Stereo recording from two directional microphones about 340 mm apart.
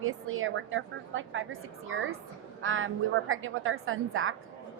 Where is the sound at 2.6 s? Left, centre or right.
Right.